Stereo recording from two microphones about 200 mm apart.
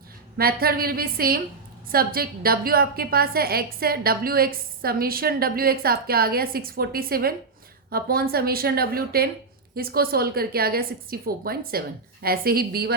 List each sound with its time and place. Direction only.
0.3 s a woman's voice: 50° right (ahead or behind)